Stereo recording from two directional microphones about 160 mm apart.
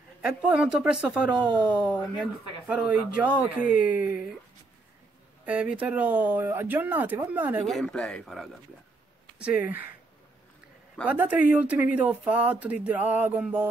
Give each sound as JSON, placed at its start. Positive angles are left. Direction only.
{"t": 0.2, "sound": "speech", "side_deg": -5}
{"t": 1.5, "sound": "speech", "side_deg": -30}
{"t": 2.1, "sound": "speech", "side_deg": -5}
{"t": 5.4, "sound": "speech", "side_deg": -10}
{"t": 7.6, "sound": "speech", "side_deg": 5}
{"t": 9.4, "sound": "speech", "side_deg": -10}
{"t": 11.1, "sound": "speech", "side_deg": -10}